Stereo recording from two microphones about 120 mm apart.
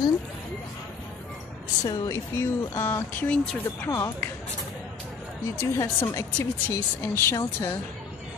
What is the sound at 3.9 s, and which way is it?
Speech, 20° left (ahead or behind).